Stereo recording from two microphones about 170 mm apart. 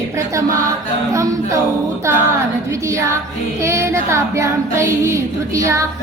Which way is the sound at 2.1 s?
15° right (ahead or behind).